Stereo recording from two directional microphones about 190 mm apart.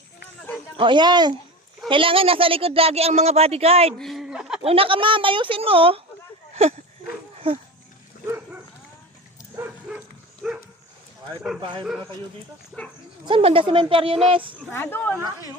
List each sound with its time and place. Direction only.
0.8 s speech: 25° right (ahead or behind)
3.9 s a sound: centre (ahead or behind)
4.6 s speech: 30° right (ahead or behind)
6.5 s a sound: 35° right (ahead or behind)
7.4 s speech: 30° right (ahead or behind)
11.6 s speech: 25° right (ahead or behind)
12.7 s speech: centre (ahead or behind)
13.2 s speech: 30° right (ahead or behind)
14.7 s speech: 10° left (ahead or behind)